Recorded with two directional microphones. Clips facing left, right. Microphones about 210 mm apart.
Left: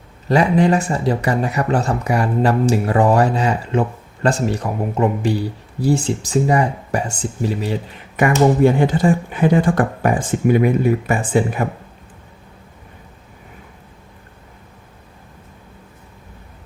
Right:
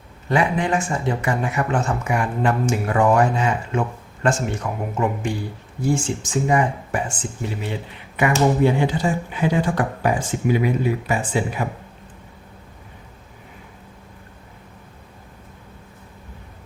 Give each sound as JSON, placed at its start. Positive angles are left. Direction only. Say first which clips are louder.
{"t": 0.3, "sound": "speech", "louder": "left 6 dB", "side_deg": 40}